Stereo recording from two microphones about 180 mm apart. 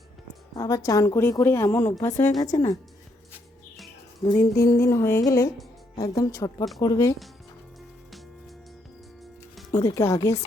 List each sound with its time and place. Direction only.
0.5 s a woman's voice: 20° left (ahead or behind)
4.3 s a woman's voice: 20° left (ahead or behind)
9.7 s a woman's voice: 15° left (ahead or behind)